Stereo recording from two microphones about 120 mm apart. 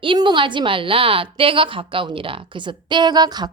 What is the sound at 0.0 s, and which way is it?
A woman's voice, 40° right (ahead or behind).